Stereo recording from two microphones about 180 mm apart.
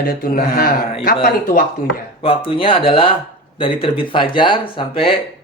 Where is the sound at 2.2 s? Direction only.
30° left (ahead or behind).